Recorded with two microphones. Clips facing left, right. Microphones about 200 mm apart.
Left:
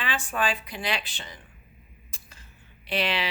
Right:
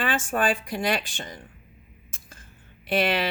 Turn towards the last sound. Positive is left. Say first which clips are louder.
# right 5 dB
turn(degrees=-50)  # may be behind; listen again after turning